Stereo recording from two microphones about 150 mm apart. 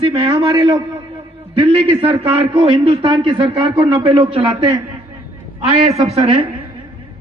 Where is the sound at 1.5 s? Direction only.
40° right (ahead or behind).